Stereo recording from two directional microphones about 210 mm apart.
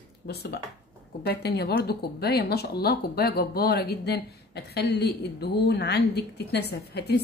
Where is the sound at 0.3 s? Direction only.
50° left (ahead or behind).